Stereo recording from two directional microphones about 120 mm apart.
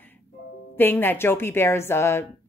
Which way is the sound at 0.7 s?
15° left (ahead or behind).